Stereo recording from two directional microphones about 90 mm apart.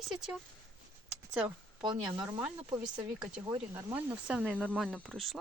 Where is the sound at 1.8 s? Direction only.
55° right (ahead or behind).